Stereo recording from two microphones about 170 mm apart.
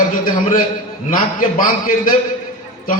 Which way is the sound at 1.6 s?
50° left (ahead or behind).